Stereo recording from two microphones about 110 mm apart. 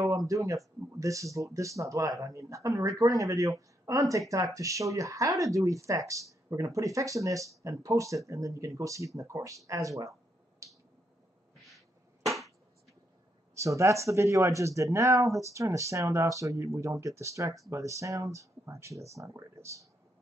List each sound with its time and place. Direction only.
0.3 s speech: 30° right (ahead or behind)
10.6 s finger snapping: 30° right (ahead or behind)
13.6 s speech: 30° right (ahead or behind)